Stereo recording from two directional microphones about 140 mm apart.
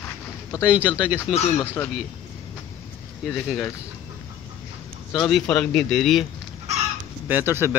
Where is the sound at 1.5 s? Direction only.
15° left (ahead or behind).